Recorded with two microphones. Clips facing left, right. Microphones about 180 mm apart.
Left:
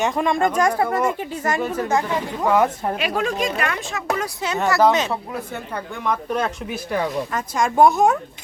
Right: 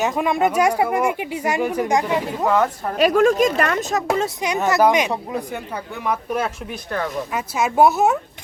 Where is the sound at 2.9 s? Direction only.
45° right (ahead or behind).